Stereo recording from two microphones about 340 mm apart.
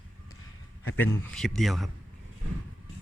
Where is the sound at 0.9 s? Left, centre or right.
Centre.